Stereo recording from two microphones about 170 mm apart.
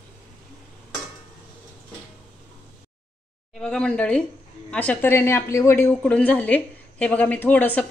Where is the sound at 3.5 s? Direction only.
5° left (ahead or behind).